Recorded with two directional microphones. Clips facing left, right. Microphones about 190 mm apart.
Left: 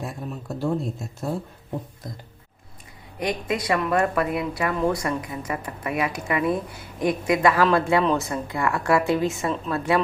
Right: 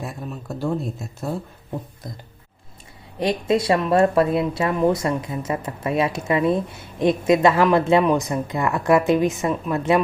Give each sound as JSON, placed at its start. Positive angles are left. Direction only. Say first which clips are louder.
{"t": 0.0, "sound": "speech", "louder": "right 1 dB", "side_deg": 0}
{"t": 3.2, "sound": "speech", "louder": "right 6 dB", "side_deg": -30}